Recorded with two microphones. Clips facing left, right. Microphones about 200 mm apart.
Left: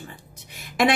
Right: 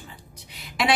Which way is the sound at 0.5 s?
50° left (ahead or behind).